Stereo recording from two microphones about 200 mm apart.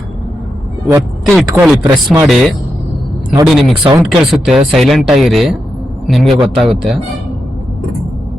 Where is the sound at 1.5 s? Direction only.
5° right (ahead or behind).